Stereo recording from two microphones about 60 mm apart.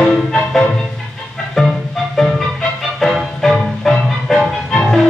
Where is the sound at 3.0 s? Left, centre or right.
Centre.